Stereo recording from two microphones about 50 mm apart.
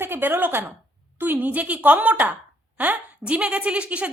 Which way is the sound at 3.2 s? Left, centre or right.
Right.